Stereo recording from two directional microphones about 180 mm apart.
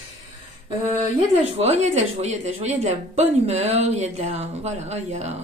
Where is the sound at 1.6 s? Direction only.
40° right (ahead or behind).